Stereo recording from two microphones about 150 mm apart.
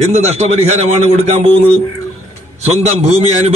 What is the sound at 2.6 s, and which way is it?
Speech, 45° right (ahead or behind).